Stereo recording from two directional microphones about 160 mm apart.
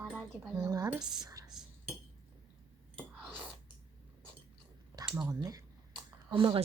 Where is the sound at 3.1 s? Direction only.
5° right (ahead or behind).